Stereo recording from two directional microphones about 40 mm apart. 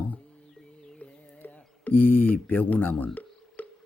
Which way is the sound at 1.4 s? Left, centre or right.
Left.